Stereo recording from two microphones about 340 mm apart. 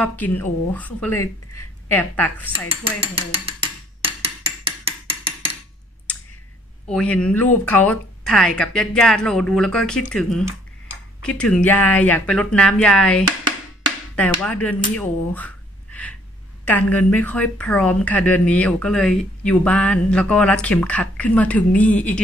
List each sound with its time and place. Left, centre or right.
0.0 s speech: centre
2.7 s music: centre
6.1 s clicking: centre
6.9 s speech: centre
14.4 s speech: centre